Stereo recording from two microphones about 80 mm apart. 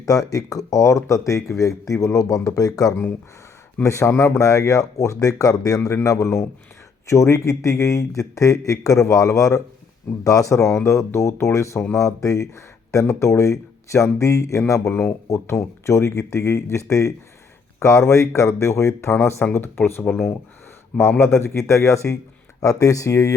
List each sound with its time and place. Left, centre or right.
0.0 s speech: left
3.8 s speech: left
19.5 s speech: left